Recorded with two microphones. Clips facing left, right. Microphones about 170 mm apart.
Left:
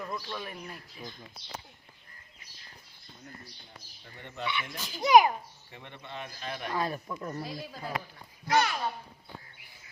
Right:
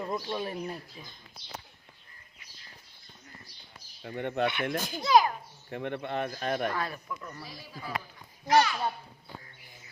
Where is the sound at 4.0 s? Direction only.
60° right (ahead or behind).